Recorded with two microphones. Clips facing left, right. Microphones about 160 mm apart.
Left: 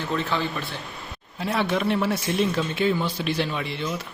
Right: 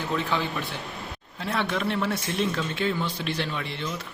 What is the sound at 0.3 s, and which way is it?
Speech, 15° right (ahead or behind).